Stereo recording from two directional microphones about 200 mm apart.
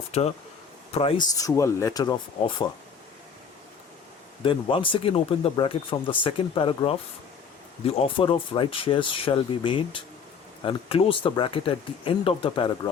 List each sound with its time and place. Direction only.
0.1 s speech: 30° left (ahead or behind)
4.4 s speech: 25° left (ahead or behind)